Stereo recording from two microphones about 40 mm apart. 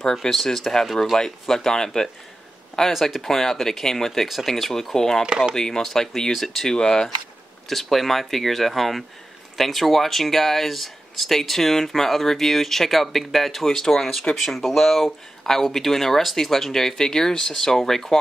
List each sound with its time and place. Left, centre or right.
0.0 s speech: centre
2.9 s speech: centre
3.3 s speech: centre
5.2 s speech: centre
5.6 s speech: centre
6.7 s speech: centre
7.6 s speech: centre